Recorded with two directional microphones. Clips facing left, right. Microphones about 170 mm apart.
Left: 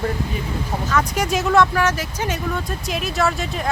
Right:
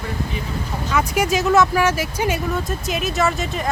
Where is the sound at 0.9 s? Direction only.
10° right (ahead or behind).